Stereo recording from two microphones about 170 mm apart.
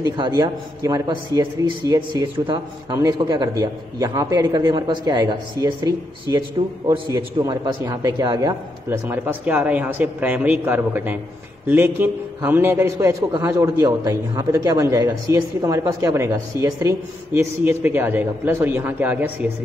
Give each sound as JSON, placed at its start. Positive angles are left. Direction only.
{"t": 0.0, "sound": "a man's voice", "side_deg": -20}